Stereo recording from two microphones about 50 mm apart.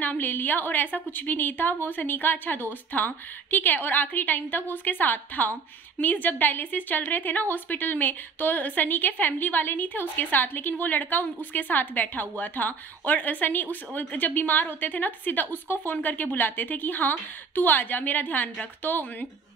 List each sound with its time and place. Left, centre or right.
0.0 s a woman's voice: left